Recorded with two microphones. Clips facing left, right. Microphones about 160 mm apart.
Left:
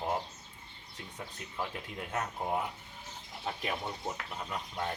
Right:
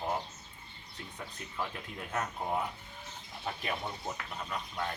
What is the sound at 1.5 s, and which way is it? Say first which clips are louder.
Speech: left 1 dB; 10° left (ahead or behind).